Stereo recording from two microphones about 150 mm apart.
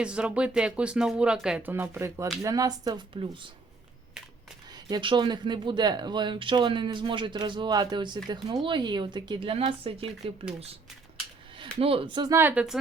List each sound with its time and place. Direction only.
0.0 s speech: 5° right (ahead or behind); by 3.3 s 25° right (ahead or behind)
4.9 s speech: 30° right (ahead or behind)
11.8 s speech: 40° right (ahead or behind)
12.3 s speech: 15° right (ahead or behind)